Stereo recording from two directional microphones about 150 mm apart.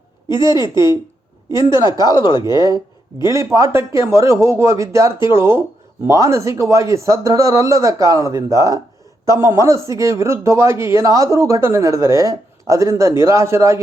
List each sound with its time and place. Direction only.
0.3 s speech: 30° left (ahead or behind)
1.8 s speech: 25° left (ahead or behind)
3.3 s speech: 20° right (ahead or behind)